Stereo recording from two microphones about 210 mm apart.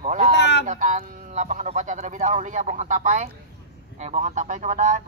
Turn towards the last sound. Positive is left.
turn(degrees=-35)  # may be behind; listen again after turning